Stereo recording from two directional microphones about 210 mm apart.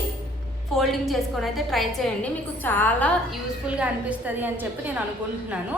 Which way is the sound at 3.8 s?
10° right (ahead or behind).